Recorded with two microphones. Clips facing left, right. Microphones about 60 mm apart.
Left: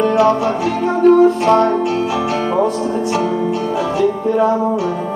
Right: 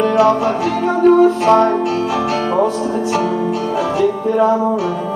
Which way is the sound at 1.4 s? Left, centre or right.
Centre.